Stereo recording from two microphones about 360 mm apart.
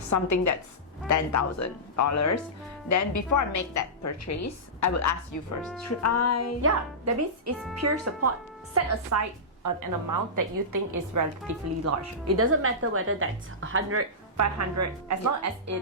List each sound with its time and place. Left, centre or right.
0.1 s a woman's voice: left
6.6 s a woman's voice: right
9.6 s a woman's voice: right
12.4 s a woman's voice: right
14.3 s a woman's voice: right